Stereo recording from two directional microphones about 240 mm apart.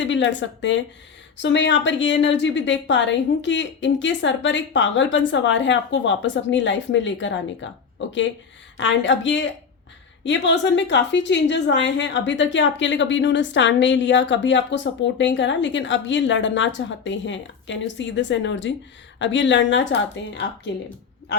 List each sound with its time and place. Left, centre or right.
0.0 s a woman's voice: left